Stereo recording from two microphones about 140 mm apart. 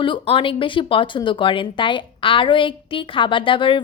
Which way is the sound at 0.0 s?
35° left (ahead or behind).